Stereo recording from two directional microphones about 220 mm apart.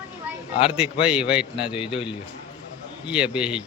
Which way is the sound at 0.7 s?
5° right (ahead or behind).